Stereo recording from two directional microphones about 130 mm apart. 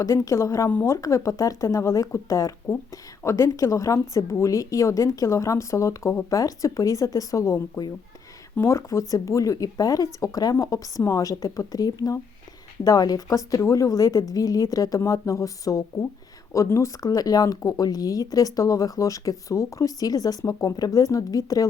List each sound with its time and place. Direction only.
0.0 s speech: 25° left (ahead or behind)